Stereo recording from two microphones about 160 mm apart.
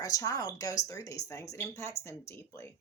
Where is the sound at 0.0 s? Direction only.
20° left (ahead or behind).